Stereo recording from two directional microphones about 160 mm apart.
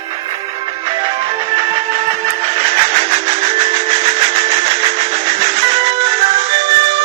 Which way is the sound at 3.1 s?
40° right (ahead or behind).